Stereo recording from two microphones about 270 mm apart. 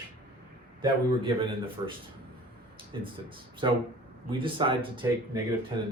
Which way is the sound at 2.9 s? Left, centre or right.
Centre.